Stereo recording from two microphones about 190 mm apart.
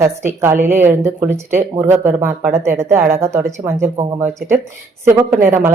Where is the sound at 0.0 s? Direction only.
15° right (ahead or behind).